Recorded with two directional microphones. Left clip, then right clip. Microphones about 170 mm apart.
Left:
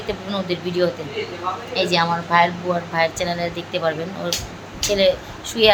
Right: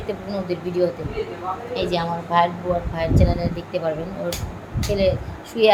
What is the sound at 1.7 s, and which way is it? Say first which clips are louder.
A woman's voice: left 5 dB; 10° left (ahead or behind).